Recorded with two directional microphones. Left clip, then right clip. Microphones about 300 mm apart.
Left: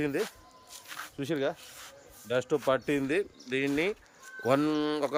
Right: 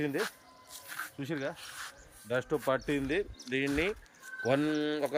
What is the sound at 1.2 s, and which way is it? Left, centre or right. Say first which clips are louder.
Speech: left 8 dB; centre.